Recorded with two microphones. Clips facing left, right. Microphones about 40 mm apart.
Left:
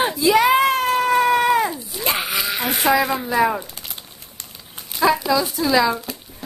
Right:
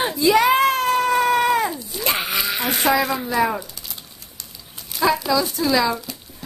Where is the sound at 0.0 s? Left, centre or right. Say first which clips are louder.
Left 1 dB; centre.